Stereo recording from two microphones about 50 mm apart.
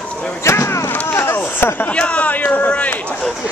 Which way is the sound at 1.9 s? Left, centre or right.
Left.